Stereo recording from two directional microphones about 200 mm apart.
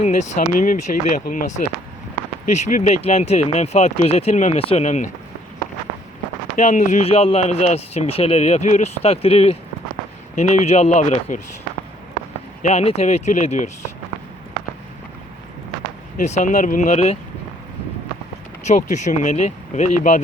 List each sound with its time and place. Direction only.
0.0 s speech: 35° left (ahead or behind)
6.6 s speech: 35° left (ahead or behind)
12.6 s speech: 30° left (ahead or behind)
16.1 s speech: 35° left (ahead or behind)
18.6 s speech: 35° left (ahead or behind)